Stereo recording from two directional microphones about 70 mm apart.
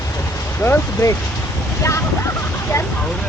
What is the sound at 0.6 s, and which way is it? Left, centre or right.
Speech, left.